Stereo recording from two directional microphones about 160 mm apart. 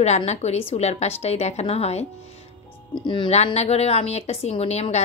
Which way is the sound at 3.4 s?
40° left (ahead or behind).